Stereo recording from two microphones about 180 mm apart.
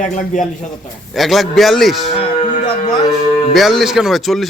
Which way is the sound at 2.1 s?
35° left (ahead or behind).